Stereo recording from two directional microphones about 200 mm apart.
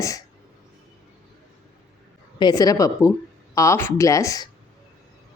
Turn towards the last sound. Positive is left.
turn(degrees=15)  # may be behind; listen again after turning